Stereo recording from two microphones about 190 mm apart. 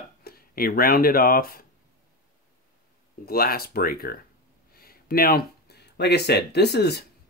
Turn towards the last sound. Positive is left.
turn(degrees=60)  # may be behind; listen again after turning